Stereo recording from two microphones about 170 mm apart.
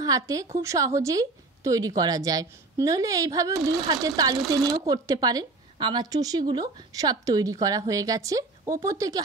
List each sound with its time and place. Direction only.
0.0 s a woman's voice: 20° right (ahead or behind)